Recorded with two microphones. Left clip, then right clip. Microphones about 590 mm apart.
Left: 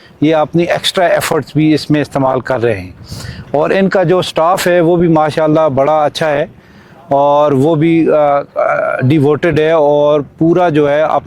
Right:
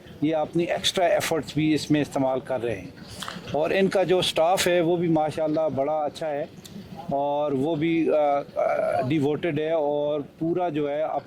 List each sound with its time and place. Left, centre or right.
0.2 s speech: left